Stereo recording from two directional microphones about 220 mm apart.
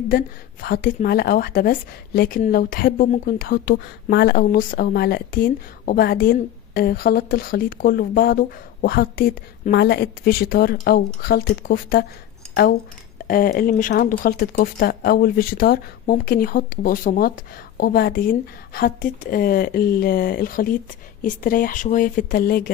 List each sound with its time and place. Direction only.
0.1 s a woman's voice: 40° left (ahead or behind)
13.3 s speech: 40° left (ahead or behind)